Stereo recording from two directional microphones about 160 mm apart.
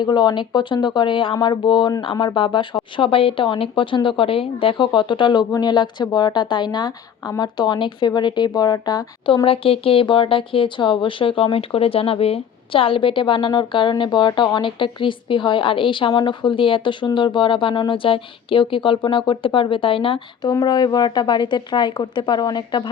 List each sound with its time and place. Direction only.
0.0 s speech: 25° left (ahead or behind)